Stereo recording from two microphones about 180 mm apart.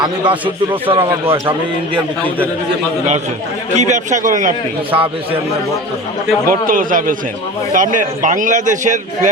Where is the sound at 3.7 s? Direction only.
40° right (ahead or behind).